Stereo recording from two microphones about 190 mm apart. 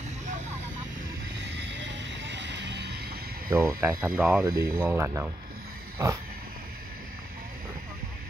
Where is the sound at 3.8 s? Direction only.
15° right (ahead or behind).